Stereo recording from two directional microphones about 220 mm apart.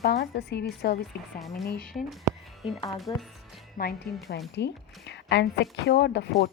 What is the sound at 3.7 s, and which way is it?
Speech, 45° left (ahead or behind).